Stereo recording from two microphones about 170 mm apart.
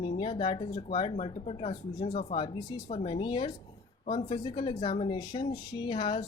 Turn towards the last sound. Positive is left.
turn(degrees=30)  # may be behind; listen again after turning